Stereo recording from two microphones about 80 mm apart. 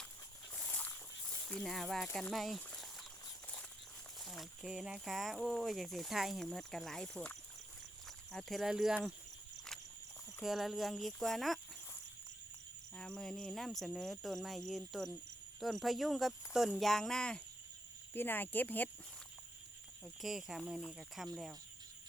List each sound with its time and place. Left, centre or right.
0.5 s a sound: centre
2.3 s speech: centre
4.2 s speech: centre
8.3 s speech: centre
10.4 s speech: centre
13.0 s speech: centre
18.1 s speech: left
20.2 s speech: centre